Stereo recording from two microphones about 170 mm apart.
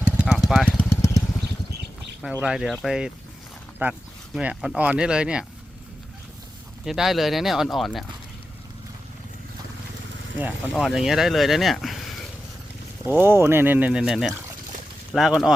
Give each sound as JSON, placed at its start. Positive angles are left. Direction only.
{"t": 0.2, "sound": "vehicle", "side_deg": -5}
{"t": 0.8, "sound": "vehicle", "side_deg": 15}
{"t": 2.2, "sound": "speech", "side_deg": -5}
{"t": 3.8, "sound": "speech", "side_deg": -10}
{"t": 6.8, "sound": "speech", "side_deg": 0}
{"t": 10.3, "sound": "speech", "side_deg": -5}
{"t": 13.1, "sound": "speech", "side_deg": -15}